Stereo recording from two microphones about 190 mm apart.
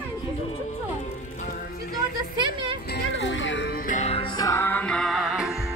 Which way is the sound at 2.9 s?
70° left (ahead or behind).